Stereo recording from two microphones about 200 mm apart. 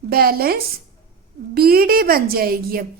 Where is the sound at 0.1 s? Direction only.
50° right (ahead or behind).